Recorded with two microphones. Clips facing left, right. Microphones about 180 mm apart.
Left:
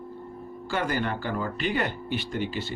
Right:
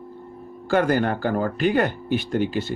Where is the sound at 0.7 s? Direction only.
50° right (ahead or behind).